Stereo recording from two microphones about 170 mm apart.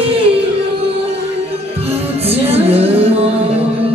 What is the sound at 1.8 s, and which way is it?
Music, 35° right (ahead or behind).